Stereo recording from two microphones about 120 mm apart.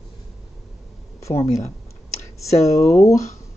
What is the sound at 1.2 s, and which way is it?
Speech, 25° left (ahead or behind).